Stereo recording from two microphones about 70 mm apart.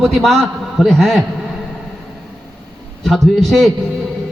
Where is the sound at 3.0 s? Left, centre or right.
Centre.